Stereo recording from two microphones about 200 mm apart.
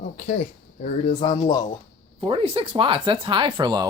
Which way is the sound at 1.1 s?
20° left (ahead or behind).